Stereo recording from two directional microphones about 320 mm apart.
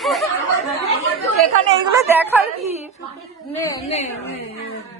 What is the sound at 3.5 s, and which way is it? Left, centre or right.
Speech, centre.